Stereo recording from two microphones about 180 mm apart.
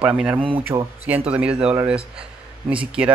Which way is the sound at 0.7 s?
25° right (ahead or behind).